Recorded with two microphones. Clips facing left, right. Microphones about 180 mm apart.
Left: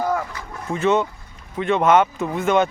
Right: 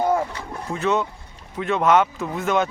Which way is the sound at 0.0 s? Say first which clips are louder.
Right 2 dB; 25° right (ahead or behind).